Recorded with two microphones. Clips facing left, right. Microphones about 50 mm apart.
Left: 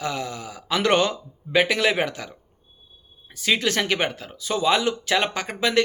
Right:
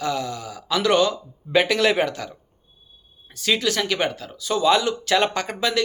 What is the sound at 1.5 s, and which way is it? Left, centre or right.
Speech, centre.